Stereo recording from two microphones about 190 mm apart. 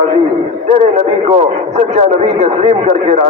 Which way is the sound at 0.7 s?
35° right (ahead or behind).